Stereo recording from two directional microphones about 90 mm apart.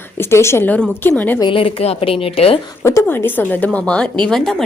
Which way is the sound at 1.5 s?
80° left.